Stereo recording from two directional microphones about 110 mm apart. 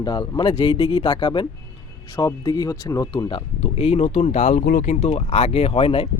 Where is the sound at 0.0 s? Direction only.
40° left (ahead or behind).